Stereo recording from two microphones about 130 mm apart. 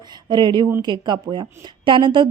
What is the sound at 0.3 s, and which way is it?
A woman's voice, 35° right (ahead or behind).